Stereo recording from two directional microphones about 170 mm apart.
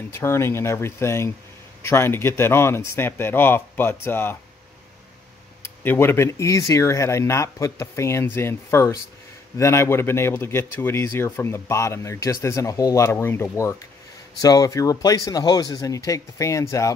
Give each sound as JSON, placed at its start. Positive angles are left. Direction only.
{"t": 0.1, "sound": "speech", "side_deg": 15}
{"t": 5.6, "sound": "speech", "side_deg": 15}